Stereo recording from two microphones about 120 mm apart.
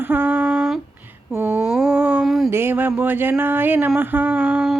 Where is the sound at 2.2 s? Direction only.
Centre (ahead or behind).